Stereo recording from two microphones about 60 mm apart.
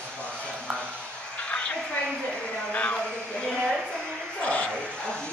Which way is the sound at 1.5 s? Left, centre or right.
Centre.